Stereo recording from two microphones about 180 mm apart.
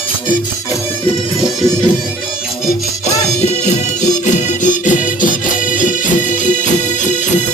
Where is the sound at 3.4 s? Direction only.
40° left (ahead or behind).